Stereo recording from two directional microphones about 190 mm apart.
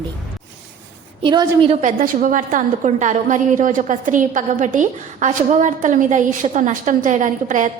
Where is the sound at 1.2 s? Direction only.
25° right (ahead or behind).